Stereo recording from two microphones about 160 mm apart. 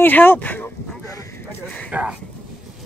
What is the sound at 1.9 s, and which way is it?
Speech, 10° right (ahead or behind).